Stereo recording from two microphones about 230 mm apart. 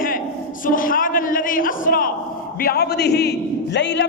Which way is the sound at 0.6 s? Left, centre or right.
Left.